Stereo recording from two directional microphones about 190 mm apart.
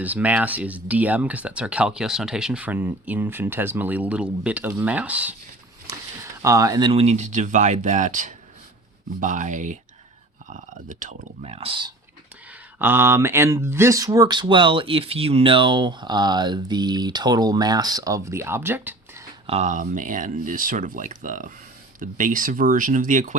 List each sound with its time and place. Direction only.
0.0 s speech: 10° right (ahead or behind)
6.4 s speech: 15° right (ahead or behind)
12.8 s speech: 10° right (ahead or behind)
19.5 s speech: 35° right (ahead or behind)